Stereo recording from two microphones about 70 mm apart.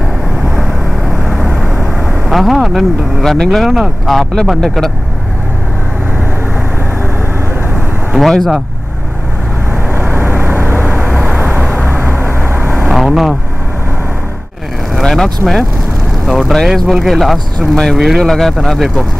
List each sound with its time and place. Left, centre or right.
0.6 s vehicle: centre
8.1 s speech: centre
9.8 s vehicle: right
12.7 s vehicle: centre
14.9 s vehicle: centre
16.3 s speech: centre